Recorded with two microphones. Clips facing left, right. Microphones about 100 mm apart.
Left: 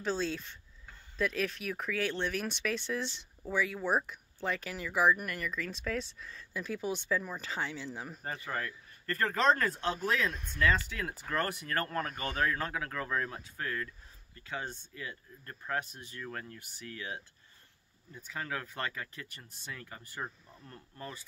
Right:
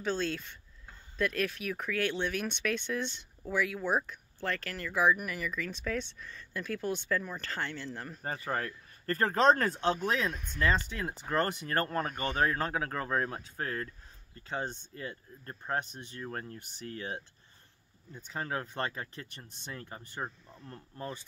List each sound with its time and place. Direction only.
0.0 s speech: centre (ahead or behind)
8.2 s speech: 45° right (ahead or behind); by 10.3 s 25° right (ahead or behind)
10.3 s speech: 5° left (ahead or behind)
10.6 s speech: 30° right (ahead or behind)